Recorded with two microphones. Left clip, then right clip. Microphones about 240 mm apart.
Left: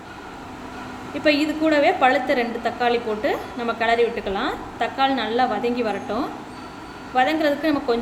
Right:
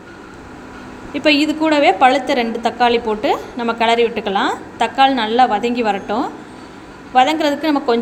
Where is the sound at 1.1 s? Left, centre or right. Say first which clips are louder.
Right 5 dB; right.